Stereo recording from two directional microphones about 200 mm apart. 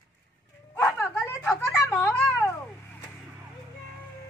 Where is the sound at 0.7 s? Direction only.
5° left (ahead or behind).